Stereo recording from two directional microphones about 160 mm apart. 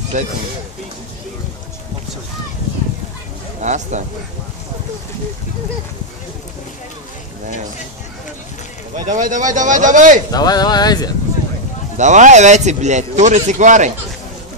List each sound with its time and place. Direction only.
0.1 s speech: 50° right (ahead or behind)
3.6 s speech: 50° right (ahead or behind)
8.9 s speech: 50° right (ahead or behind)
10.3 s speech: 25° left (ahead or behind)
12.0 s speech: 50° right (ahead or behind)